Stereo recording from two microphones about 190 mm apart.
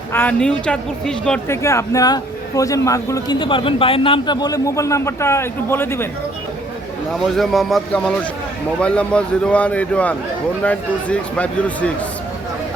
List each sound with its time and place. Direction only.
0.1 s a man's voice: 10° left (ahead or behind)
1.6 s a man's voice: 15° left (ahead or behind)
7.3 s a man's voice: centre (ahead or behind)